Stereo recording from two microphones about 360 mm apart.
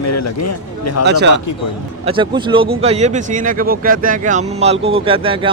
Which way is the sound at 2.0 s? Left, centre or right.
Centre.